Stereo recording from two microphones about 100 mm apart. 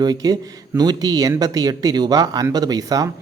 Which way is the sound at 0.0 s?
40° right (ahead or behind).